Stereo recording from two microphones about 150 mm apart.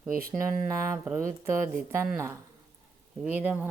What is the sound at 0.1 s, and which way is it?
Speech, 75° right (ahead or behind).